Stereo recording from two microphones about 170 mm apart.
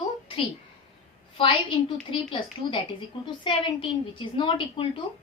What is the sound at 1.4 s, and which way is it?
Speech, 30° left (ahead or behind).